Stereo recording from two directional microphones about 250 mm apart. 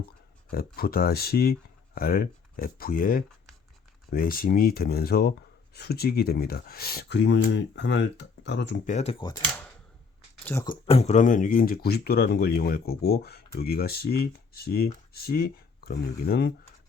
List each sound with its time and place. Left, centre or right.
0.5 s speech: left
8.9 s speech: left
10.4 s speech: centre
10.8 s speech: left